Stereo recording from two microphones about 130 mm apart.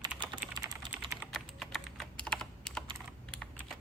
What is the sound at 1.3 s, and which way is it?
Computer keyboard, centre (ahead or behind).